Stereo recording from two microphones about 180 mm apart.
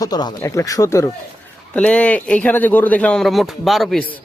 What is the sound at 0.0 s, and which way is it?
Speech, 20° left (ahead or behind).